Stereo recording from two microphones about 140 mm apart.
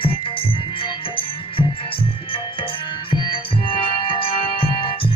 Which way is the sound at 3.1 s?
35° left (ahead or behind).